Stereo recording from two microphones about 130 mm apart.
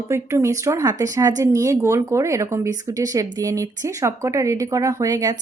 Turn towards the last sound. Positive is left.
turn(degrees=-25)  # may be behind; listen again after turning